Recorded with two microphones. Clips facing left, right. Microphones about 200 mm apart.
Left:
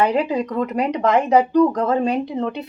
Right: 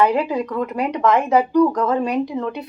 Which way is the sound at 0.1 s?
25° left (ahead or behind).